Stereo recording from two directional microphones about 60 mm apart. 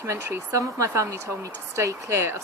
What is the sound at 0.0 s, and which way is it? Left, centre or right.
Speech, right.